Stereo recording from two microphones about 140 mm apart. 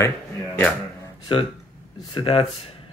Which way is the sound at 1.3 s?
35° left (ahead or behind).